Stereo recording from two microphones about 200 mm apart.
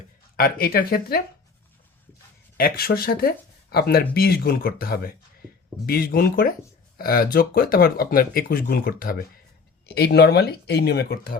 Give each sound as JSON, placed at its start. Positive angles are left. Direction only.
{"t": 0.3, "sound": "speech", "side_deg": 50}
{"t": 2.6, "sound": "speech", "side_deg": 50}